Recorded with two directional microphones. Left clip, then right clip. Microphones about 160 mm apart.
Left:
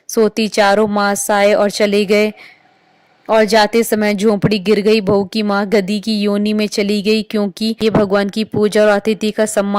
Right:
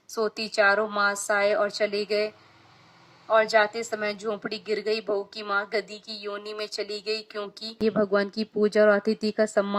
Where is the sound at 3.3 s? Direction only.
45° left (ahead or behind).